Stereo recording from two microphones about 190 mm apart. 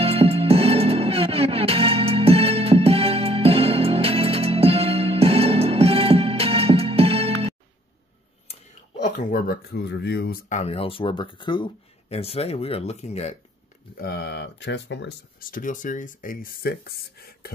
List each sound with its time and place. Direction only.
0.0 s music: 30° right (ahead or behind)
9.3 s speech: 55° left (ahead or behind)
10.5 s speech: 35° left (ahead or behind)
13.9 s speech: 55° left (ahead or behind)
15.5 s speech: 45° left (ahead or behind)